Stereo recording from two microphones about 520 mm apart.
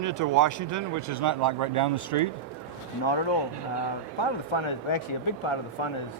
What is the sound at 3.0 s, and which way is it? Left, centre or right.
Speech, left.